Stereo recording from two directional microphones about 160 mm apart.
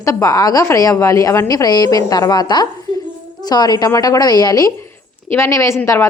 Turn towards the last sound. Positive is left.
turn(degrees=15)  # may be behind; listen again after turning